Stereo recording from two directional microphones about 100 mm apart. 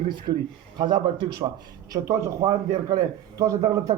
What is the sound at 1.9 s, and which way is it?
Speech, 30° right (ahead or behind).